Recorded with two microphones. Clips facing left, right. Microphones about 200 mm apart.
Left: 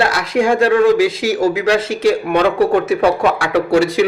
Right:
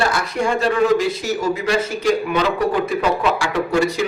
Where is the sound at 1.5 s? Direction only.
75° left (ahead or behind).